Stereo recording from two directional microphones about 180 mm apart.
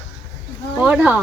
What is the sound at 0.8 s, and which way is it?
Speech, 5° right (ahead or behind).